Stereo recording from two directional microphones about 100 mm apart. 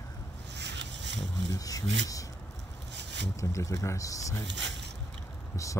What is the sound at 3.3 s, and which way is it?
Speech, 30° left (ahead or behind).